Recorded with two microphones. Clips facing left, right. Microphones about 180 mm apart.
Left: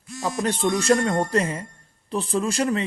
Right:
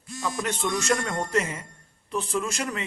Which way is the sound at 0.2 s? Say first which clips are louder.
Left 5 dB; 35° left (ahead or behind).